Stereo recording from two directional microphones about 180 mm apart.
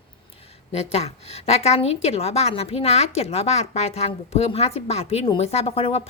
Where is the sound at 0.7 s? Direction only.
35° left (ahead or behind).